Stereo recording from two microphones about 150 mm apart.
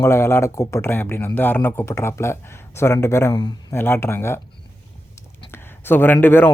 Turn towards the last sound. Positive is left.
turn(degrees=15)  # may be behind; listen again after turning